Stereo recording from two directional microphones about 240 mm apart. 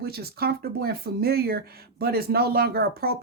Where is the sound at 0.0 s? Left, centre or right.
Right.